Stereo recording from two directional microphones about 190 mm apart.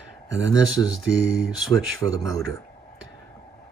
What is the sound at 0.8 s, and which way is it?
Speech, 15° left (ahead or behind).